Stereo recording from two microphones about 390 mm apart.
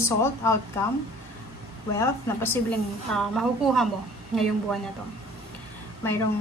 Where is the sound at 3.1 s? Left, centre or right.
Centre.